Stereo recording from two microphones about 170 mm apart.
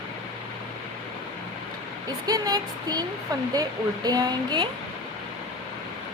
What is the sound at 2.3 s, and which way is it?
Speech, 20° right (ahead or behind).